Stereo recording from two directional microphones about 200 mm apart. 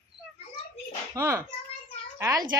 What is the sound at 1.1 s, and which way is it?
A child's voice, 15° right (ahead or behind).